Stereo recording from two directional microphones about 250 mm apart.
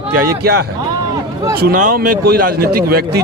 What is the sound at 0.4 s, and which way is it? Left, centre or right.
Speech, right.